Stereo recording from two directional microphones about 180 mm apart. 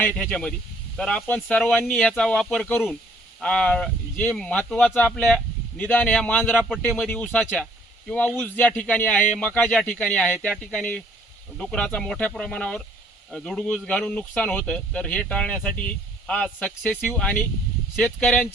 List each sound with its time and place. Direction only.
0.0 s speech: 5° left (ahead or behind)